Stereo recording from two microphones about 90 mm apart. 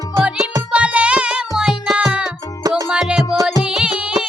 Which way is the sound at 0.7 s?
15° right (ahead or behind).